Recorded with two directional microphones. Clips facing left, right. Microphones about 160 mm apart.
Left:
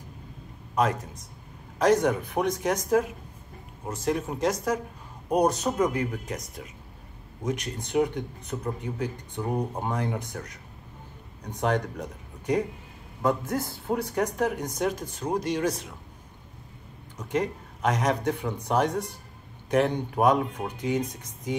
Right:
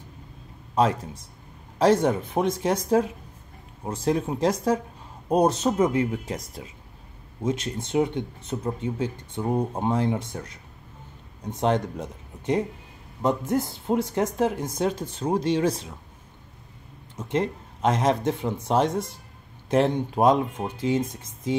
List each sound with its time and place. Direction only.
0.7 s speech: 30° right (ahead or behind)
17.2 s speech: 25° right (ahead or behind)